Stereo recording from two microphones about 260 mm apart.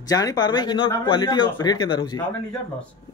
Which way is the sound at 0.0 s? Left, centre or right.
Centre.